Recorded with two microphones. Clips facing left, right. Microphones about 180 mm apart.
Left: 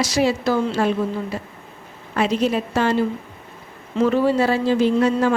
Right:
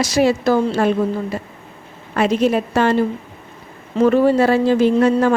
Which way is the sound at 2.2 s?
55° right (ahead or behind).